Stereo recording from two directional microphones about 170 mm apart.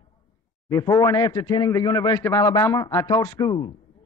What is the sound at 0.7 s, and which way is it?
A man's voice, 20° left (ahead or behind).